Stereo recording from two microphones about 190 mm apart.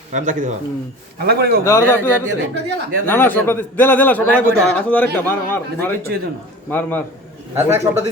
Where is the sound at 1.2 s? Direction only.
55° right (ahead or behind).